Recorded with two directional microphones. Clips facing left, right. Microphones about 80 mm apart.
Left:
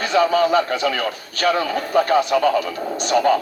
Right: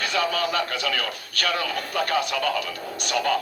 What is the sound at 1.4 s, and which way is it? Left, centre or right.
A man's voice, left.